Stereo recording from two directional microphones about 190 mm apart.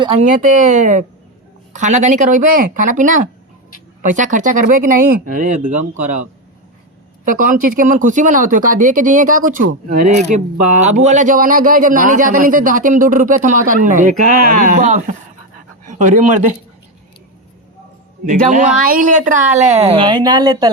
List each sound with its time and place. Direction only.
0.2 s speech: 45° right (ahead or behind)
7.3 s speech: 45° right (ahead or behind)
10.8 s speech: 40° right (ahead or behind)
18.3 s a woman's voice: 40° right (ahead or behind); by 20.7 s 20° right (ahead or behind)